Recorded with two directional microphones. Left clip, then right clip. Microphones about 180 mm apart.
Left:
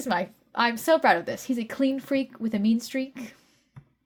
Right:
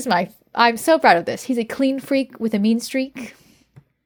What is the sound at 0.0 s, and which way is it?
A woman's voice, 40° right (ahead or behind).